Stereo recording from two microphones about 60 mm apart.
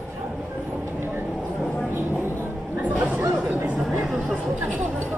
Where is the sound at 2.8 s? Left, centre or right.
Right.